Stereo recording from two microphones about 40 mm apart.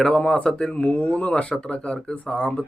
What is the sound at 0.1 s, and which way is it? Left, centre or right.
A man's voice, left.